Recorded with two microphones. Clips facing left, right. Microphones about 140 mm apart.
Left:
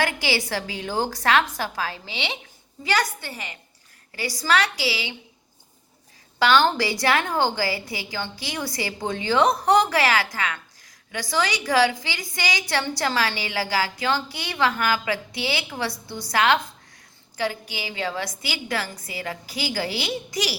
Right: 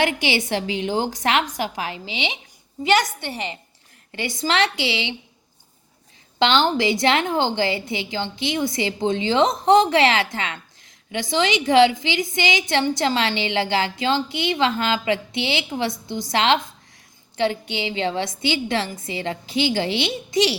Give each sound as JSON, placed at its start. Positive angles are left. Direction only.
{"t": 0.0, "sound": "a woman's voice", "side_deg": -20}
{"t": 6.4, "sound": "a woman's voice", "side_deg": -20}